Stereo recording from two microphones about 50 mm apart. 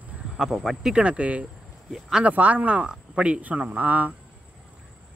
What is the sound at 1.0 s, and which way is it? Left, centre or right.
Speech, right.